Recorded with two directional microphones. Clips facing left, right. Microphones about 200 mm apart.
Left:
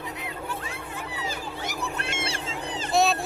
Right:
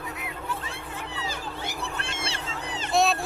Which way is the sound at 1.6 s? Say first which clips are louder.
Left 4 dB; 30° right (ahead or behind).